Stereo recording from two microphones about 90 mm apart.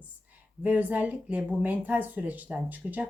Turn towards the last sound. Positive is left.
turn(degrees=-15)  # may be behind; listen again after turning